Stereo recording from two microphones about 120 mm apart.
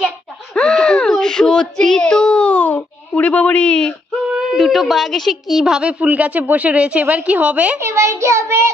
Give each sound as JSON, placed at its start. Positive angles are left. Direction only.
{"t": 0.6, "sound": "speech", "side_deg": 5}
{"t": 4.3, "sound": "a woman's voice", "side_deg": -5}
{"t": 7.8, "sound": "child singing", "side_deg": -25}